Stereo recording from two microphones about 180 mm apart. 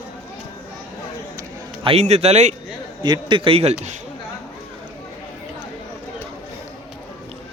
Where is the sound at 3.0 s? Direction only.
25° right (ahead or behind).